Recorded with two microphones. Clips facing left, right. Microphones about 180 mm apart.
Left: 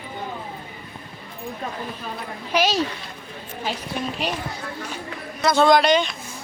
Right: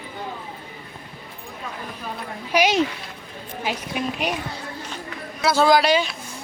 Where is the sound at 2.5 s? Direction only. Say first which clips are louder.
Right 2 dB; 15° right (ahead or behind).